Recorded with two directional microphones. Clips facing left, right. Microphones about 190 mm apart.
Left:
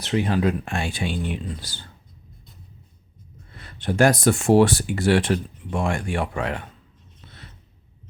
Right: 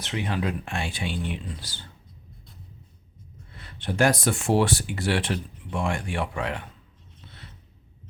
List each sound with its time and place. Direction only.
0.0 s speech: 40° left (ahead or behind)
3.6 s speech: 45° left (ahead or behind)